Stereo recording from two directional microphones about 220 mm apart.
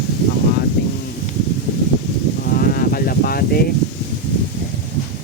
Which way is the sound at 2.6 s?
45° left (ahead or behind).